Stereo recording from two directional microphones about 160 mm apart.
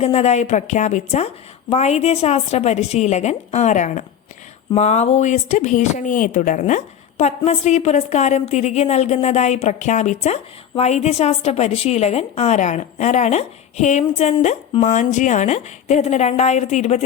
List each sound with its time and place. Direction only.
0.0 s speech: 40° left (ahead or behind)